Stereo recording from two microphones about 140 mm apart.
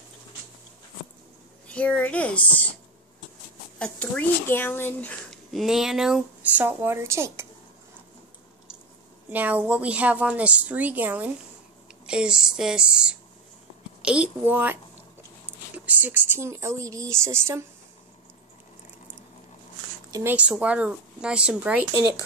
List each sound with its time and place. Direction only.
1.7 s speech: 10° left (ahead or behind)
3.8 s speech: 10° left (ahead or behind)
5.3 s speech: centre (ahead or behind); by 7.4 s 20° right (ahead or behind)
9.3 s speech: 10° right (ahead or behind)
20.1 s a sound: 20° right (ahead or behind)
20.3 s speech: 10° right (ahead or behind)